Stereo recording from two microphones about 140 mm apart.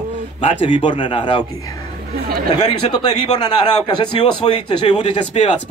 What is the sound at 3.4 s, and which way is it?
Speech, 30° left (ahead or behind).